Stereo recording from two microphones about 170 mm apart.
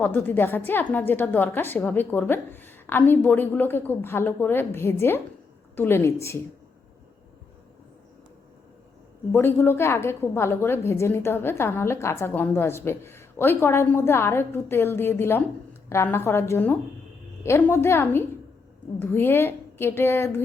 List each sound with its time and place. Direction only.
0.0 s a woman's voice: 10° left (ahead or behind)
9.3 s a woman's voice: 15° left (ahead or behind)